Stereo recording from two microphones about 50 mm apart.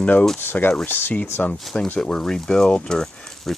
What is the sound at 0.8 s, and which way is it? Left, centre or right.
Speech, left.